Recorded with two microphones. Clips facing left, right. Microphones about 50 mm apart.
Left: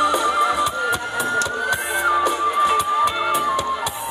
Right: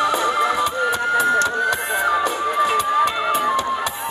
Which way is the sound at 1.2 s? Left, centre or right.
Right.